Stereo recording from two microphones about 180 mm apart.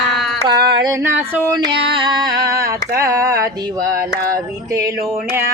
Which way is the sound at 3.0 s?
15° right (ahead or behind).